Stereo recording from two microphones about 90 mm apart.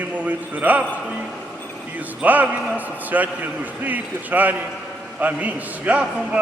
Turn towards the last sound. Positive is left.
turn(degrees=-15)  # may be behind; listen again after turning